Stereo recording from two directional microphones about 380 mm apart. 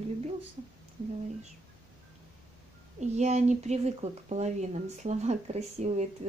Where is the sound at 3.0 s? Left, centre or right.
Centre.